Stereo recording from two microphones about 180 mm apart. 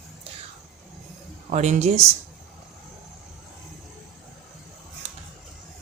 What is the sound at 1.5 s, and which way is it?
Speech, 40° right (ahead or behind).